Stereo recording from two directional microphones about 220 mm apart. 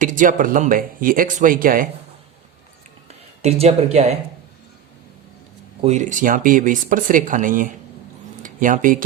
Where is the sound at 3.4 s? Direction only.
30° right (ahead or behind).